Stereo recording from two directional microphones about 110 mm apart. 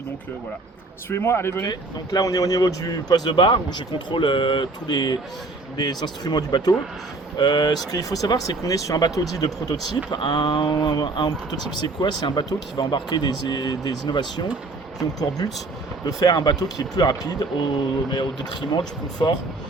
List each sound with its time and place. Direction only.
1.1 s speech: 25° left (ahead or behind)
1.6 s speech: 40° left (ahead or behind)
19.2 s speech: 45° left (ahead or behind)